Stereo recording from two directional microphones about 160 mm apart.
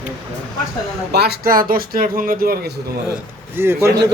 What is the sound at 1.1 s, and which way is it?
Speech, 85° right.